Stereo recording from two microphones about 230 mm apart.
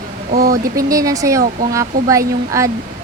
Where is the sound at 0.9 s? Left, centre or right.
Centre.